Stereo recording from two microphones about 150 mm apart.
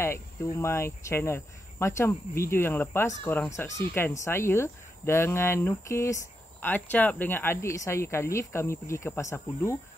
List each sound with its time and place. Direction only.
0.0 s speech: 15° left (ahead or behind)